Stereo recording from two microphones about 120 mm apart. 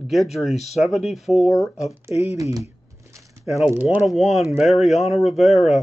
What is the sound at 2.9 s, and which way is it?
Shuffling cards, 25° right (ahead or behind).